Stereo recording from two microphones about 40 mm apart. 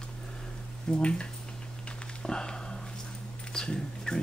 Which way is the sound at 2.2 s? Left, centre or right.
Centre.